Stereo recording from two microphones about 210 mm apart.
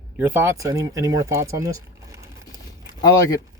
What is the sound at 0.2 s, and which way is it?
Speech, 10° right (ahead or behind).